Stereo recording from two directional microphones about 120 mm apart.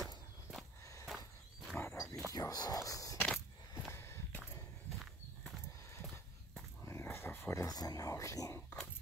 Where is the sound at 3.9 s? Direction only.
20° left (ahead or behind).